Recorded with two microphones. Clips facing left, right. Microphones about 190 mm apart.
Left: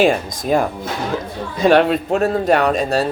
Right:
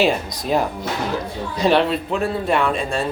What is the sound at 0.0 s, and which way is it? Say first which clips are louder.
A man's voice: left 3 dB; 50° left (ahead or behind).